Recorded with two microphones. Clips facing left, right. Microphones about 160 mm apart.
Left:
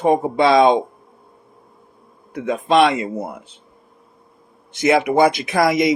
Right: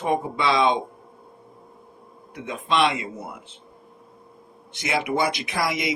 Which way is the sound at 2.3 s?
45° left (ahead or behind).